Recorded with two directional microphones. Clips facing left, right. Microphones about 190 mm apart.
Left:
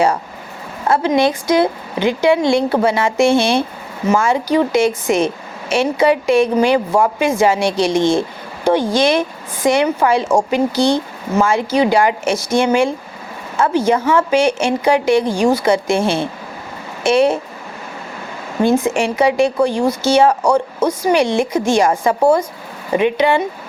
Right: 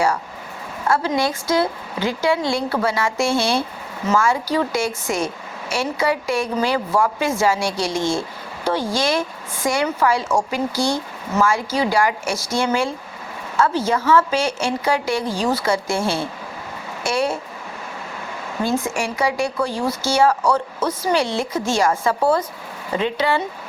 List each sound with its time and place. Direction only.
0.9 s a woman's voice: 20° left (ahead or behind)
18.6 s a woman's voice: 20° left (ahead or behind)